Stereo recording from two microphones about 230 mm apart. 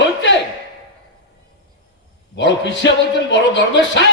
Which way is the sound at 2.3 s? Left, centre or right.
Left.